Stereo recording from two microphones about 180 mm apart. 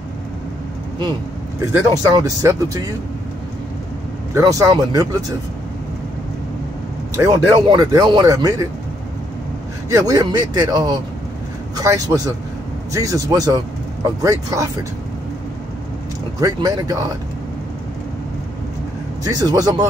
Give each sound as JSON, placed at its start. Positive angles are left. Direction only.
{"t": 1.7, "sound": "speech", "side_deg": -20}
{"t": 4.3, "sound": "speech", "side_deg": -15}
{"t": 7.2, "sound": "speech", "side_deg": -20}
{"t": 9.9, "sound": "speech", "side_deg": -20}
{"t": 16.3, "sound": "speech", "side_deg": -20}
{"t": 19.2, "sound": "speech", "side_deg": -20}